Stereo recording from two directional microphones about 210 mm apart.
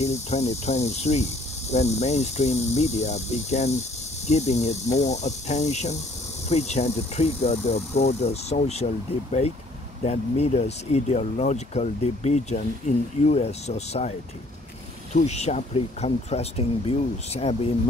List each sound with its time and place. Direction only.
0.0 s speech: 30° left (ahead or behind)
15.1 s speech: 30° left (ahead or behind)